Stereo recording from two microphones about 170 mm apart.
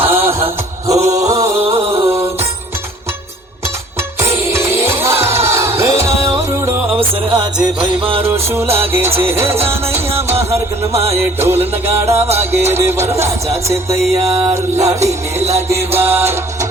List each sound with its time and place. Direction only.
0.1 s music: 15° right (ahead or behind)
0.9 s music: 40° right (ahead or behind)
1.3 s music: 20° right (ahead or behind)
1.6 s music: 35° right (ahead or behind)
4.2 s music: 15° right (ahead or behind)
7.3 s music: 25° right (ahead or behind)
8.2 s music: 15° right (ahead or behind)
11.1 s music: 15° right (ahead or behind)
14.3 s music: 35° right (ahead or behind)
14.5 s music: 15° right (ahead or behind)
15.0 s music: 40° right (ahead or behind)
15.7 s music: 15° right (ahead or behind)